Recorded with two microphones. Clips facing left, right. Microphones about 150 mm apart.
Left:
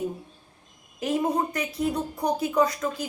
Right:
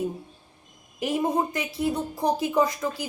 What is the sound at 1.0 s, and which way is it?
Speech, 10° right (ahead or behind).